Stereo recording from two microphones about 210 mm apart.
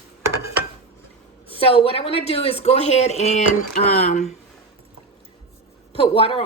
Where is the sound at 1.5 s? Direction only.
25° left (ahead or behind).